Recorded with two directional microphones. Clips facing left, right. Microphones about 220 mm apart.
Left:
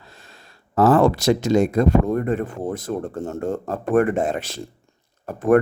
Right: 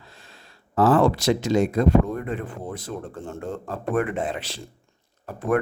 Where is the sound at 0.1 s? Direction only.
45° left (ahead or behind).